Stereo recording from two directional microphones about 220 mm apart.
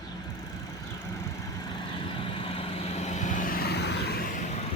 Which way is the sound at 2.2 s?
25° left (ahead or behind).